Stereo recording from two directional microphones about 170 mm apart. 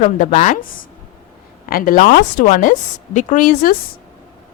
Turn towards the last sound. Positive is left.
turn(degrees=55)  # may be behind; listen again after turning